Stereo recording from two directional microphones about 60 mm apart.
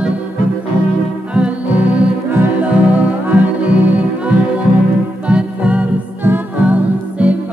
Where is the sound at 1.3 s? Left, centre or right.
Right.